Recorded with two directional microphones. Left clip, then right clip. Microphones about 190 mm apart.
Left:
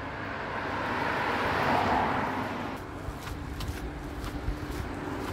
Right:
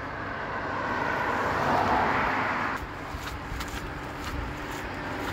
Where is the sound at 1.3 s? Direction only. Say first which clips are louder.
Right 1 dB; 15° right (ahead or behind).